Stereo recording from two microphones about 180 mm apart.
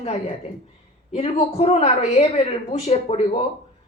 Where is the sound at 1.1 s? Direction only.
35° left (ahead or behind).